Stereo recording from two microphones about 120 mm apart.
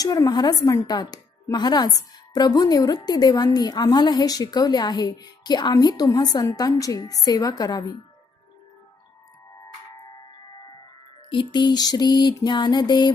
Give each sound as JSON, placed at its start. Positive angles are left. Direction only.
{"t": 0.0, "sound": "a woman's voice", "side_deg": 30}
{"t": 11.3, "sound": "a woman's voice", "side_deg": 40}